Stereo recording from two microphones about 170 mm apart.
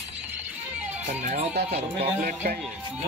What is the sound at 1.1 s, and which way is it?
Speech, 45° right (ahead or behind).